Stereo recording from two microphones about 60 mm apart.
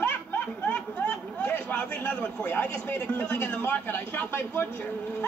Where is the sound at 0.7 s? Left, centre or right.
Left.